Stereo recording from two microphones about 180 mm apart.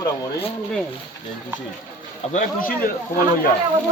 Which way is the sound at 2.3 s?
50° left (ahead or behind).